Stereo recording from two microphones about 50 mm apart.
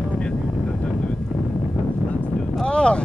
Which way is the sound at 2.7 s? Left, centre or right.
Centre.